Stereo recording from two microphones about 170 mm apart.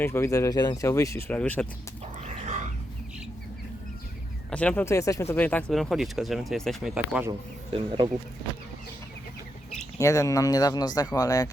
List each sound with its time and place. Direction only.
0.0 s speech: 15° left (ahead or behind)
4.5 s speech: 10° left (ahead or behind)
7.7 s speech: 30° right (ahead or behind)
10.0 s speech: 20° left (ahead or behind)